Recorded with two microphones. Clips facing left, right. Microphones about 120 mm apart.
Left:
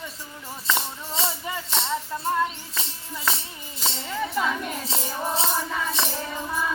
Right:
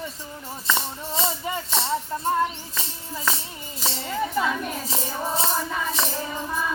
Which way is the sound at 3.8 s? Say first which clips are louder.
Right 2 dB; 15° right (ahead or behind).